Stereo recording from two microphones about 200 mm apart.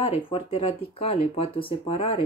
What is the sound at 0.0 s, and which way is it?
Speech, 30° left (ahead or behind).